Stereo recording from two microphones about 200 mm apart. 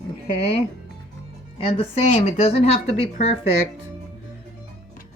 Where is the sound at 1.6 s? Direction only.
30° left (ahead or behind).